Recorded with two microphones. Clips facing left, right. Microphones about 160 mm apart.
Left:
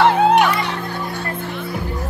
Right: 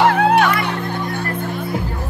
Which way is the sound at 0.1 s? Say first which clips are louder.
Even; 20° left (ahead or behind).